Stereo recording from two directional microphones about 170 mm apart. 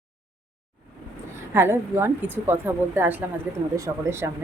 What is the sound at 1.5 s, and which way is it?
Speech, 15° right (ahead or behind).